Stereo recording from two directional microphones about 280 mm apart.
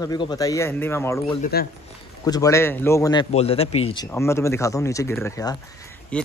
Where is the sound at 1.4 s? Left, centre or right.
Left.